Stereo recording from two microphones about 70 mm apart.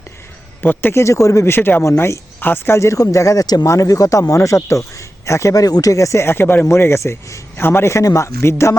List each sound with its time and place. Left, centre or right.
0.6 s a man's voice: left
1.0 s speech: left
1.5 s a man's voice: left
2.7 s speech: left
3.4 s speech: left
3.7 s speech: left
6.2 s a man's voice: left